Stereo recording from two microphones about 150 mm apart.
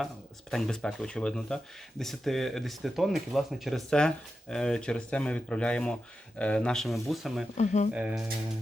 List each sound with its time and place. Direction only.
0.5 s speech: 5° left (ahead or behind)
7.5 s speech: 50° left (ahead or behind)
7.9 s speech: 10° right (ahead or behind)